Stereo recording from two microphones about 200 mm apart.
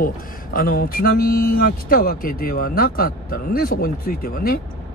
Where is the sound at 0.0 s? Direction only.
45° left (ahead or behind).